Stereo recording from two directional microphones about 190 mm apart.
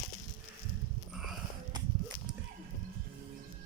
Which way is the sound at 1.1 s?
Centre (ahead or behind).